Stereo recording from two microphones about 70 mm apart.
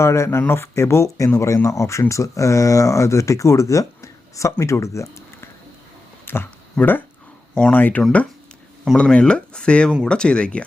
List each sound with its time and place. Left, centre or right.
0.0 s speech: left
6.2 s a sound: left
6.7 s speech: left
9.1 s speech: centre